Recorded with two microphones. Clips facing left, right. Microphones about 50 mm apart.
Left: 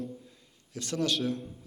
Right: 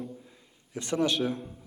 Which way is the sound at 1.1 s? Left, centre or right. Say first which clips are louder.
Right 2 dB; centre.